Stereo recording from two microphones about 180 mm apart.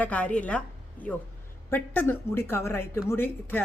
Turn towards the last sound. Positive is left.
turn(degrees=10)  # may be behind; listen again after turning